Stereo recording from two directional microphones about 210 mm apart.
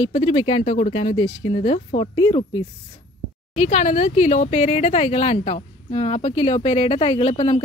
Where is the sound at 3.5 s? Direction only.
35° left (ahead or behind).